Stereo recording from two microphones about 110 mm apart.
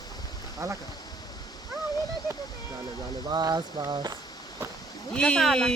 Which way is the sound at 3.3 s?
40° right (ahead or behind).